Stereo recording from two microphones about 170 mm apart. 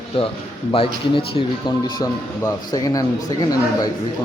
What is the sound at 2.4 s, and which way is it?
A man's voice, 20° left (ahead or behind).